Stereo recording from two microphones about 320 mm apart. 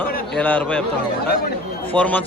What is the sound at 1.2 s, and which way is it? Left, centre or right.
Speech, left.